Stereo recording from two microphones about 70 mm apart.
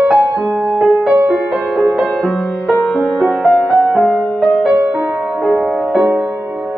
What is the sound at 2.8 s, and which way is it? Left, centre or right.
Music, centre.